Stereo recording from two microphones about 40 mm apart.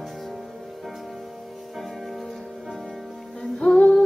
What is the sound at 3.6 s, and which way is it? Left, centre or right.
Music, left.